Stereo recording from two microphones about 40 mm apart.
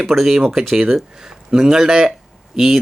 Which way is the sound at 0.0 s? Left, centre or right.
Centre.